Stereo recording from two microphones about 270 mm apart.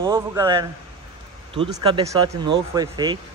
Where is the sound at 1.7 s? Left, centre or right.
Centre.